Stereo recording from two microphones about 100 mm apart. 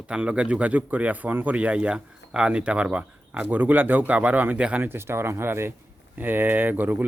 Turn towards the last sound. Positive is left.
turn(degrees=-20)  # may be behind; listen again after turning